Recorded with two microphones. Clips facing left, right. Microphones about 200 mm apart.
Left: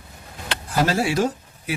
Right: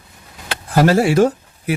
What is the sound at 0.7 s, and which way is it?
Speech, 55° right (ahead or behind).